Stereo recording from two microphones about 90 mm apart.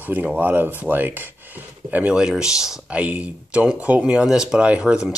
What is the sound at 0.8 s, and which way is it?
Rub, 20° right (ahead or behind).